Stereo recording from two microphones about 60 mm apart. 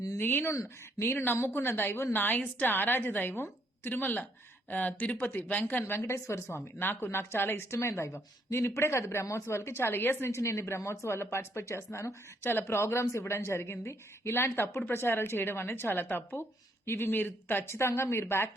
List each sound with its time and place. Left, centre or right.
0.2 s a woman's voice: left
2.1 s a woman's voice: left
5.8 s a woman's voice: left
17.7 s a woman's voice: left